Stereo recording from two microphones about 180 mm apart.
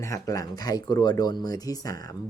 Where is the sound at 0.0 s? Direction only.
20° left (ahead or behind).